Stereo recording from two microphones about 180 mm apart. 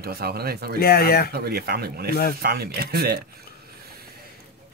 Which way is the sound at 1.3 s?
60° right (ahead or behind).